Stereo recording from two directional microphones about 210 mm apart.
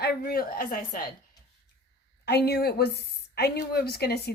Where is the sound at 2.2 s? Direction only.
50° left (ahead or behind).